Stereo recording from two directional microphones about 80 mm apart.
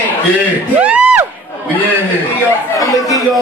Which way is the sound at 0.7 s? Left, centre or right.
Centre.